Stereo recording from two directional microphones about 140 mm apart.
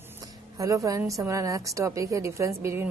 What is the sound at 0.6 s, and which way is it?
Speech, 25° right (ahead or behind).